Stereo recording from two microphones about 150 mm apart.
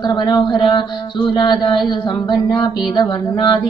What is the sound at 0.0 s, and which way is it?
Speech, 30° left (ahead or behind).